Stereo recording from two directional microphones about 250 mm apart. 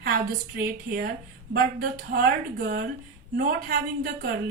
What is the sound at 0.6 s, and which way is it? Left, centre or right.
A woman's voice, right.